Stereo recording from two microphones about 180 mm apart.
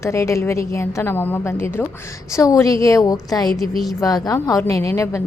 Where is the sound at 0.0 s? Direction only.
15° left (ahead or behind).